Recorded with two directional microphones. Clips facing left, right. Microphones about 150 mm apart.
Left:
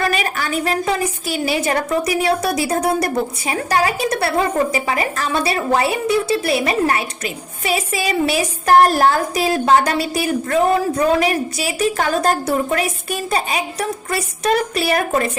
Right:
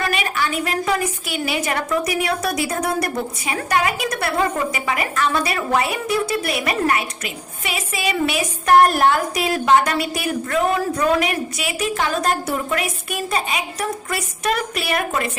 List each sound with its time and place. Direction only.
0.0 s a woman's voice: 40° left (ahead or behind)